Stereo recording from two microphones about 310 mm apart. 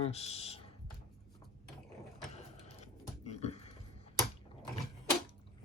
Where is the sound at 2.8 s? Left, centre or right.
Left.